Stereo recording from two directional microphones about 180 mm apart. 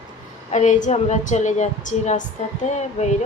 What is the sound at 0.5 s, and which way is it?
Speech, 40° left (ahead or behind).